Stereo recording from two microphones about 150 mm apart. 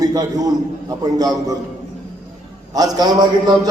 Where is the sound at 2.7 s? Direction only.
25° right (ahead or behind).